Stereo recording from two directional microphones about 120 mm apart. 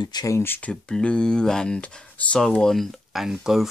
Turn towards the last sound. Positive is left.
turn(degrees=-5)  # may be behind; listen again after turning